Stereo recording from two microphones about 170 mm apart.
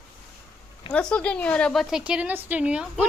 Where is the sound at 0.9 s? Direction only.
5° left (ahead or behind).